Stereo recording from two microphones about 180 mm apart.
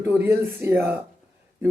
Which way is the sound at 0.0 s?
10° right (ahead or behind).